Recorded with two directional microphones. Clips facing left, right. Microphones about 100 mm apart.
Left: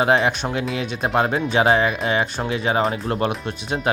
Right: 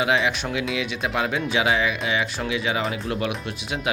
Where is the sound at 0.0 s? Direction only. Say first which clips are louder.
Left 4 dB; 40° left (ahead or behind).